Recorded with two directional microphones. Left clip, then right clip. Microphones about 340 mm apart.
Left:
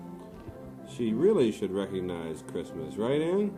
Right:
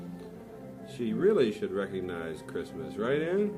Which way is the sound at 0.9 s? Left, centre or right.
Left.